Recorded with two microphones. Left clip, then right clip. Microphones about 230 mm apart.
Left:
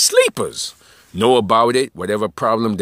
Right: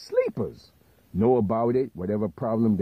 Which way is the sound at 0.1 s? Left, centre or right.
Left.